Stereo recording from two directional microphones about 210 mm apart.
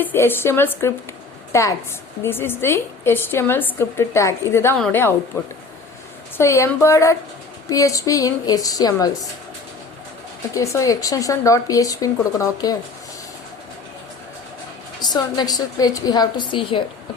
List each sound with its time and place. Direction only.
0.0 s a woman's voice: 10° left (ahead or behind)
10.5 s a woman's voice: 15° left (ahead or behind)
15.1 s a woman's voice: 20° left (ahead or behind)